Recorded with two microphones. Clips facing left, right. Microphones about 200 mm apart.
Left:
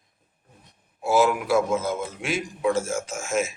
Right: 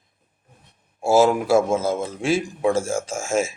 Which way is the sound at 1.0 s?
30° right (ahead or behind).